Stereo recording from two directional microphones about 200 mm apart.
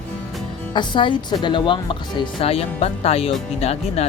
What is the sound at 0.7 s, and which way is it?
Speech, 25° left (ahead or behind).